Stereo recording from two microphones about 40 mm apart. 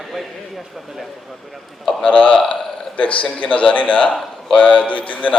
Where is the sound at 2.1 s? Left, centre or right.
Left.